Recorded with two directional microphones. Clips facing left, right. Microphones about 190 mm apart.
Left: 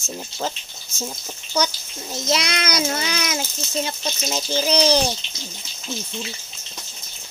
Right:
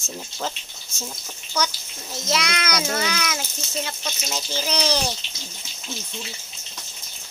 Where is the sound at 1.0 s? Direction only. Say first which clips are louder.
Left 5 dB; 20° left (ahead or behind).